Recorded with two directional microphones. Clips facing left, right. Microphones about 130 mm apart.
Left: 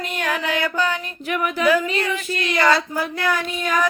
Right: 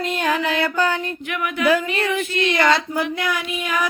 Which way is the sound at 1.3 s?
35° left (ahead or behind).